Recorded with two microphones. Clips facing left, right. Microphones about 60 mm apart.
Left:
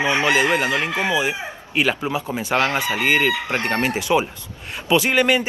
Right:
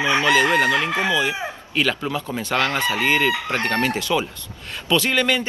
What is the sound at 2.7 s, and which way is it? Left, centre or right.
Chicken, right.